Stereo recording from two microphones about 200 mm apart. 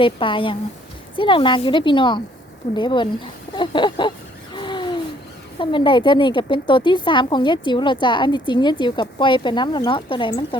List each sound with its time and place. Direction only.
0.0 s a woman's voice: 25° left (ahead or behind)
4.5 s gasp: 25° left (ahead or behind)
5.5 s a woman's voice: 25° left (ahead or behind)